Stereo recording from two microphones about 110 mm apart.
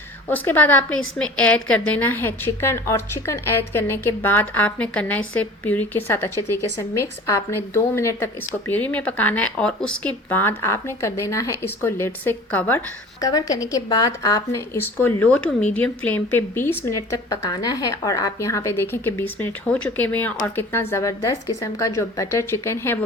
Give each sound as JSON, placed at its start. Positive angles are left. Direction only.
{"t": 0.3, "sound": "a woman's voice", "side_deg": 15}
{"t": 13.2, "sound": "a woman's voice", "side_deg": 30}